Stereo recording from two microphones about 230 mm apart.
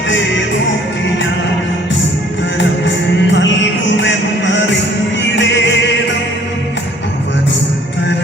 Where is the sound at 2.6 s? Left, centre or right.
Left.